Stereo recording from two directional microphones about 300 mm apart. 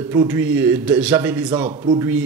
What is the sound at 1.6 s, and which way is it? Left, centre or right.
Speech, centre.